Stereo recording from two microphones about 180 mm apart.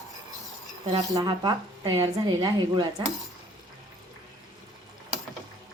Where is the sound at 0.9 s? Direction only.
25° right (ahead or behind).